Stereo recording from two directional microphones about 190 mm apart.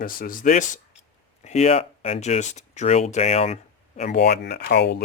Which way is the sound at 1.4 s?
35° left (ahead or behind).